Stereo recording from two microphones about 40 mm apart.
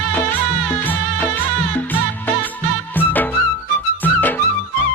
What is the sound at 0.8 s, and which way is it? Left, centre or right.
Music, left.